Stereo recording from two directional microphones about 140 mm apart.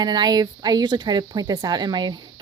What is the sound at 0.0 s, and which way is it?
Speech, 30° right (ahead or behind).